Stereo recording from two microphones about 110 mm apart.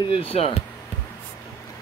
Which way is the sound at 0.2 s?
65° left (ahead or behind).